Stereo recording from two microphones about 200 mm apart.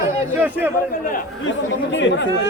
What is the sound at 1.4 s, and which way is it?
Speech, 65° left (ahead or behind).